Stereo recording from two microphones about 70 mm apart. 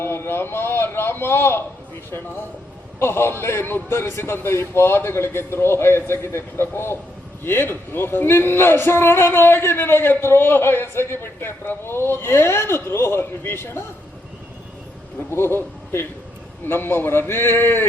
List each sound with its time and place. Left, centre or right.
0.0 s a sound: left
2.0 s speech: left
15.3 s a man's voice: left